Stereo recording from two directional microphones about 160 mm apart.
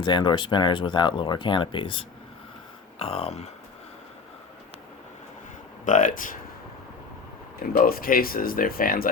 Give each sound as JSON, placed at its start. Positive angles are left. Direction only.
{"t": 0.0, "sound": "speech", "side_deg": 30}
{"t": 5.8, "sound": "speech", "side_deg": 55}
{"t": 7.7, "sound": "speech", "side_deg": 65}